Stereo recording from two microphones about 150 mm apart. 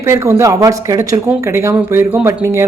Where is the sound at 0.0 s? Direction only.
15° right (ahead or behind).